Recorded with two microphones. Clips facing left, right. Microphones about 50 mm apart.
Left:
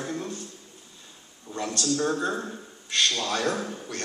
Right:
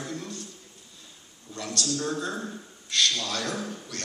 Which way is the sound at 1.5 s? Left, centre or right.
Left.